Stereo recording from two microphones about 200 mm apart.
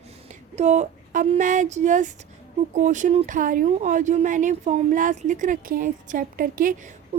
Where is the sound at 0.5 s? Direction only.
35° right (ahead or behind).